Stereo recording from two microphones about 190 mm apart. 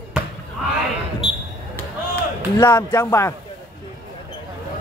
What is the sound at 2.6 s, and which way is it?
Speech, 10° left (ahead or behind).